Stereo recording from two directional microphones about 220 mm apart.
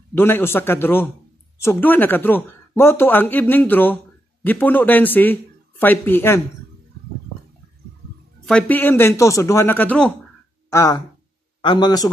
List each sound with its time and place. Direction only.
0.1 s speech: 10° left (ahead or behind)
8.5 s a man's voice: 5° left (ahead or behind)